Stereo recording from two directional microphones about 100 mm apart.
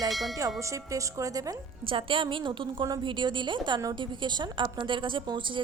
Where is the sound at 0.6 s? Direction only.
30° right (ahead or behind).